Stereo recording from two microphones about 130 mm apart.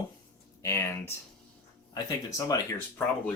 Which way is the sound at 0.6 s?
20° left (ahead or behind).